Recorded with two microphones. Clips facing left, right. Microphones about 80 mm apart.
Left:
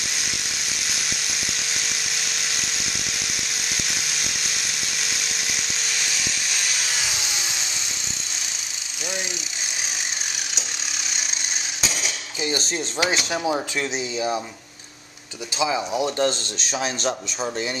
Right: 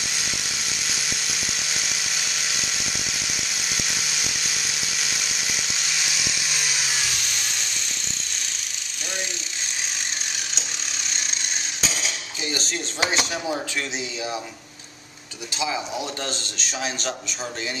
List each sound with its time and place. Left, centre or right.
1.8 s electric toothbrush: centre
5.2 s a sound: centre
11.8 s cutlery: centre
12.4 s a sound: centre
13.0 s speech: right
13.3 s speech: centre
15.6 s speech: left